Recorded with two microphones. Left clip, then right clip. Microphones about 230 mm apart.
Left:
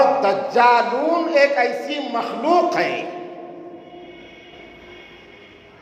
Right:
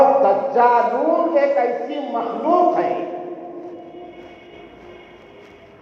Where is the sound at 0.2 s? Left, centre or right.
Left.